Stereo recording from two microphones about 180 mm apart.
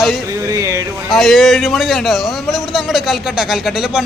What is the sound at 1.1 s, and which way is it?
A man's voice, centre (ahead or behind).